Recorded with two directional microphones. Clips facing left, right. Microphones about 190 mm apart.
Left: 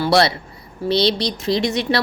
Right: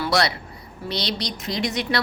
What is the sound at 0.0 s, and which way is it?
A woman's voice, 30° left (ahead or behind).